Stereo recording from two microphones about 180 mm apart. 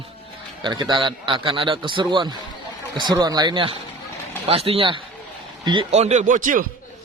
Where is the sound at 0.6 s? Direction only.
25° right (ahead or behind).